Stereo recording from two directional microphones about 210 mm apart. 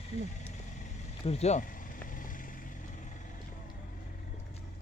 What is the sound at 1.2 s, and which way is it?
Vehicle, 30° left (ahead or behind).